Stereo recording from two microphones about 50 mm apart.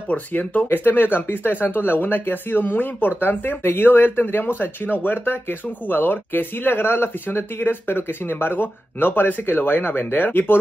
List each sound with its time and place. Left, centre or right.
0.1 s speech: left